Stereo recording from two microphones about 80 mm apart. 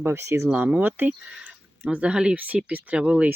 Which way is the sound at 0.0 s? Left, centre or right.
Right.